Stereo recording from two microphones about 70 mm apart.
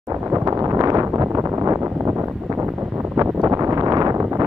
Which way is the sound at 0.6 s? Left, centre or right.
Right.